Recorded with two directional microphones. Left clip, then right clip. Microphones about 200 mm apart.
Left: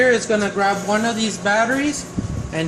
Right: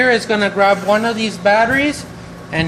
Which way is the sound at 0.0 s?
50° right (ahead or behind).